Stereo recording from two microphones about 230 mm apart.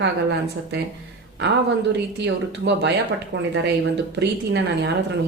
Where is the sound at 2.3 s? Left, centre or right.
Right.